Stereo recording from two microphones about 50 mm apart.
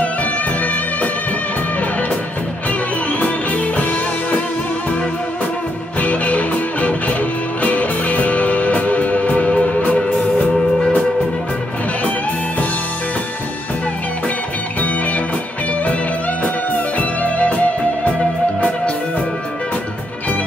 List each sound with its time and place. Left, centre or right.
0.0 s music: left
3.1 s music: left
5.9 s music: left
17.0 s music: left